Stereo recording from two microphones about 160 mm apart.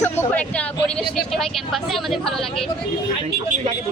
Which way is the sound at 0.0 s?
10° left (ahead or behind).